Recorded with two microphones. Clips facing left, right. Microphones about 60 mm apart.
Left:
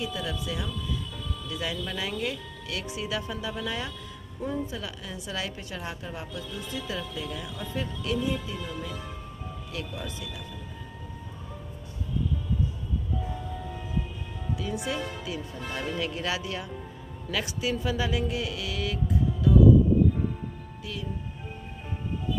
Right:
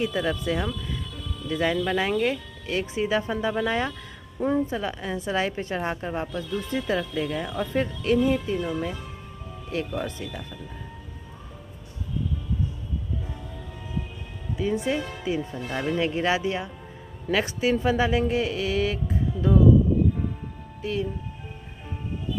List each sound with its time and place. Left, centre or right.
0.0 s speech: right
14.6 s speech: right
20.8 s speech: right